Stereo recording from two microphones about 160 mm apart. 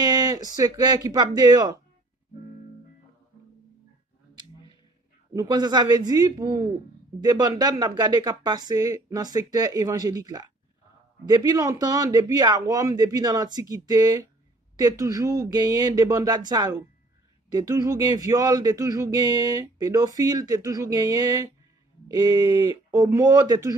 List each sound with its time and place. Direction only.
0.0 s a sound: 25° right (ahead or behind)
0.6 s speech: 25° right (ahead or behind)
5.3 s speech: 25° right (ahead or behind)